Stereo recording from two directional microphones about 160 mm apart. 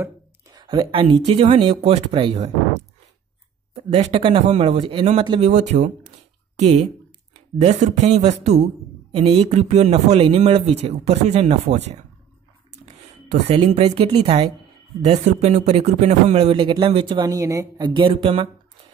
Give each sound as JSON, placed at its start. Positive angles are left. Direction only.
{"t": 0.0, "sound": "speech", "side_deg": -25}
{"t": 3.7, "sound": "a man's voice", "side_deg": -35}
{"t": 5.5, "sound": "a man's voice", "side_deg": -50}
{"t": 13.6, "sound": "a man's voice", "side_deg": -35}
{"t": 17.2, "sound": "a woman's voice", "side_deg": -20}